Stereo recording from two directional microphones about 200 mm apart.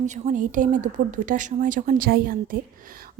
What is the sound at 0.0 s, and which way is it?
Speech, 35° right (ahead or behind).